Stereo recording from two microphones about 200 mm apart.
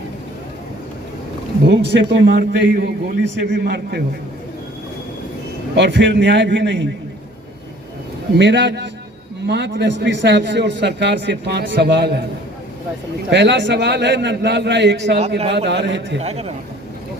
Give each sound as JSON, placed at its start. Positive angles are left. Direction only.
{"t": 1.6, "sound": "a man's voice", "side_deg": -60}
{"t": 5.7, "sound": "a man's voice", "side_deg": -60}
{"t": 8.4, "sound": "a man's voice", "side_deg": -60}
{"t": 13.3, "sound": "a man's voice", "side_deg": -60}
{"t": 16.2, "sound": "a man's voice", "side_deg": -30}